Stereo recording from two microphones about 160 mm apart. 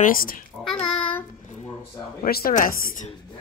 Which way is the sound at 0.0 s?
60° left (ahead or behind).